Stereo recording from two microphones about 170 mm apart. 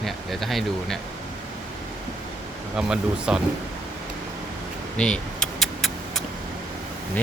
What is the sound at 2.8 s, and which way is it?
Speech, 5° right (ahead or behind).